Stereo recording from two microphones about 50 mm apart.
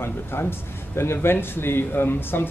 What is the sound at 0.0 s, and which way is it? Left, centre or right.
A man's voice, left.